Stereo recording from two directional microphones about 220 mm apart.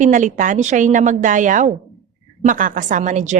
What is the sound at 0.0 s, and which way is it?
A woman's voice, 35° right (ahead or behind).